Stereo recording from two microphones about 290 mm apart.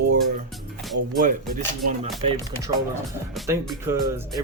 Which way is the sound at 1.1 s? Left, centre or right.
Right.